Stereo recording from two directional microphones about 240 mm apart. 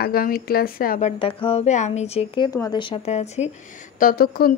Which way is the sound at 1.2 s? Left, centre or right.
Left.